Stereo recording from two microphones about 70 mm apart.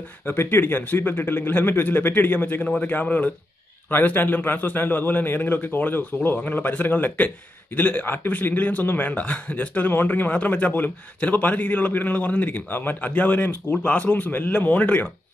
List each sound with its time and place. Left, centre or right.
0.2 s a man's voice: left